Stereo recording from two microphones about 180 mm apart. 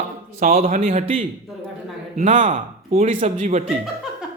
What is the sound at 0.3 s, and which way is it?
A man's voice, 50° right (ahead or behind).